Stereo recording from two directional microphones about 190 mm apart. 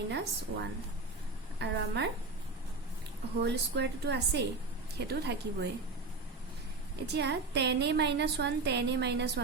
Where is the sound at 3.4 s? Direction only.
65° right (ahead or behind).